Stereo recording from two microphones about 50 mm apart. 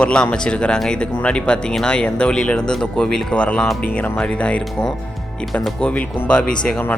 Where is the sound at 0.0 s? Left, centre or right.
Centre.